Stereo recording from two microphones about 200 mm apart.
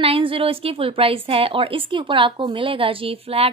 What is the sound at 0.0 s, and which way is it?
A woman's voice, 25° right (ahead or behind).